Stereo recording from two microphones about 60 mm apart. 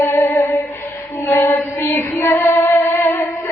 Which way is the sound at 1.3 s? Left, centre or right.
Left.